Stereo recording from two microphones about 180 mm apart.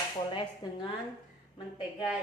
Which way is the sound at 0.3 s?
25° left (ahead or behind).